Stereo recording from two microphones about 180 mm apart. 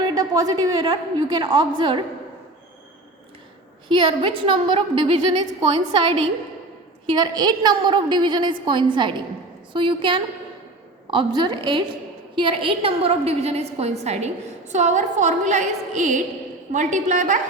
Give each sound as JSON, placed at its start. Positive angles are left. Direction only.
{"t": 0.1, "sound": "a woman's voice", "side_deg": -20}
{"t": 3.8, "sound": "a woman's voice", "side_deg": -30}